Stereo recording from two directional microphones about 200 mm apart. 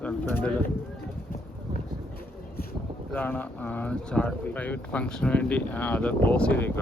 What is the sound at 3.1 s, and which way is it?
Speech, 10° left (ahead or behind).